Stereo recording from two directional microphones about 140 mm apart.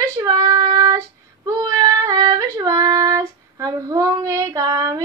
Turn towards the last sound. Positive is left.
turn(degrees=-20)  # may be behind; listen again after turning